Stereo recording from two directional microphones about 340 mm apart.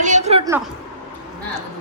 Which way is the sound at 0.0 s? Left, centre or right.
Centre.